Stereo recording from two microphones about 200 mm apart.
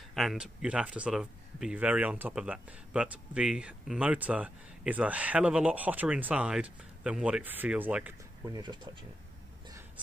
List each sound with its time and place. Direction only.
0.1 s speech: centre (ahead or behind)
8.5 s speech: 20° right (ahead or behind)